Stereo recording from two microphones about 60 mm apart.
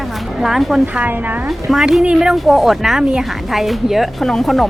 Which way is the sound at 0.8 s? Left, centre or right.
Right.